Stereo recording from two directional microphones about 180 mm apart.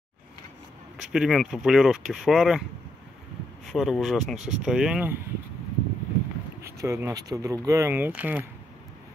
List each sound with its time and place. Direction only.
0.9 s speech: 5° right (ahead or behind)
3.6 s speech: centre (ahead or behind)
4.4 s speech: 40° right (ahead or behind)
4.6 s speech: 5° right (ahead or behind)
6.6 s speech: 15° right (ahead or behind)